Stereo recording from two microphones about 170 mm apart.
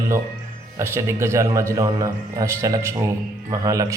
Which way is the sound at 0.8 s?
15° right (ahead or behind).